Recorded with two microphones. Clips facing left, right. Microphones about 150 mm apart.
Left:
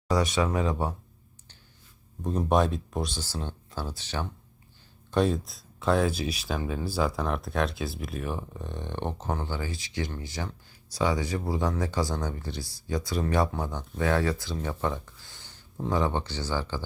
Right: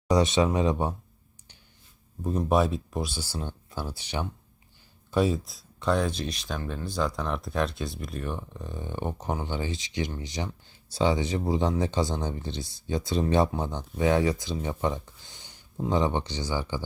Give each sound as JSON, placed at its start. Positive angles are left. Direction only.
{"t": 0.1, "sound": "speech", "side_deg": -25}
{"t": 2.2, "sound": "speech", "side_deg": 0}
{"t": 5.1, "sound": "speech", "side_deg": -5}